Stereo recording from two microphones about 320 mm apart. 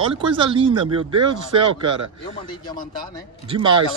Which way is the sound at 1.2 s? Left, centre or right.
Right.